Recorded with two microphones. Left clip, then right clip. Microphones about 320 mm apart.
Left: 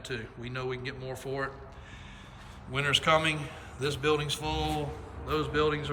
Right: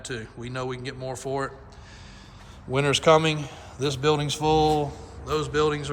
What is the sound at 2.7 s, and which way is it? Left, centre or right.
A man's voice, centre.